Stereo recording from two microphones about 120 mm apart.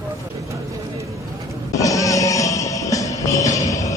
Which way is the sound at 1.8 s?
25° left (ahead or behind).